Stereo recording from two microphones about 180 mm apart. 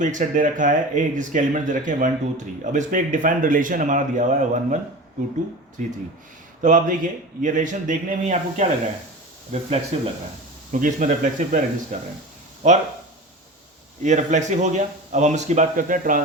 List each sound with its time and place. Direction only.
0.0 s speech: 45° right (ahead or behind)
5.8 s a man's voice: 45° right (ahead or behind)
10.7 s a man's voice: 45° right (ahead or behind)
14.0 s a man's voice: 40° right (ahead or behind)